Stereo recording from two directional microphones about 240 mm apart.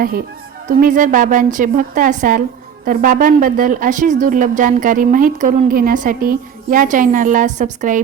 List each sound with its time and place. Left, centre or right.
0.7 s a woman's voice: right